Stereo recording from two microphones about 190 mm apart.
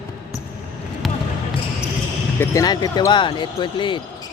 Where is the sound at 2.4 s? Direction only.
20° left (ahead or behind).